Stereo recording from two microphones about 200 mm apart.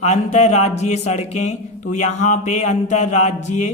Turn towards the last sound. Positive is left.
turn(degrees=35)  # may be behind; listen again after turning